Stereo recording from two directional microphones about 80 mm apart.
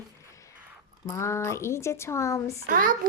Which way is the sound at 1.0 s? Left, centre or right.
Left.